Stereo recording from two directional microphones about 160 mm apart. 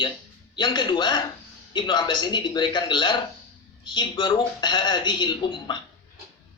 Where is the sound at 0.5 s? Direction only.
30° left (ahead or behind).